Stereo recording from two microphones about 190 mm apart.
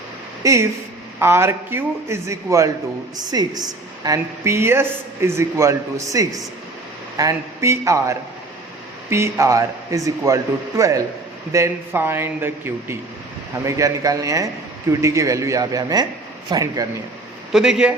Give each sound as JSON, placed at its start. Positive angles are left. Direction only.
{"t": 0.4, "sound": "a woman's voice", "side_deg": -15}
{"t": 17.5, "sound": "speech", "side_deg": -5}